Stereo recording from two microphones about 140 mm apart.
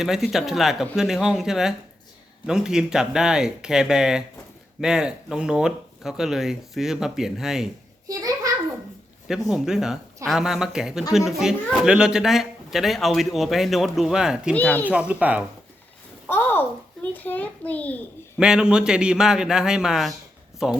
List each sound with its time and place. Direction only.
0.0 s speech: 5° right (ahead or behind)
8.0 s a sound: 25° right (ahead or behind)
9.5 s speech: 5° right (ahead or behind)
14.5 s a child's voice: 10° left (ahead or behind)
14.8 s speech: 10° right (ahead or behind)
16.2 s a child's voice: 15° left (ahead or behind)
18.3 s speech: 5° right (ahead or behind)